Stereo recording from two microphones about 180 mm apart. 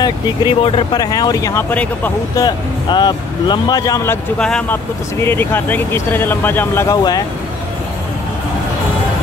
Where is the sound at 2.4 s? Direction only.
25° left (ahead or behind).